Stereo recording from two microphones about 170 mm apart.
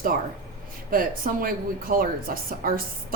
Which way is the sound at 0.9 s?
55° right (ahead or behind).